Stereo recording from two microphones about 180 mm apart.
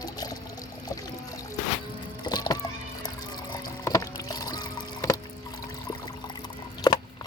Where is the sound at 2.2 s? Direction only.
25° left (ahead or behind).